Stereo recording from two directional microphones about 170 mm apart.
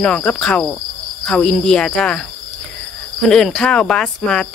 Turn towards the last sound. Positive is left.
turn(degrees=5)  # may be behind; listen again after turning